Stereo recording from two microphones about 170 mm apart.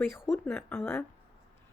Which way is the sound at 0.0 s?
10° left (ahead or behind).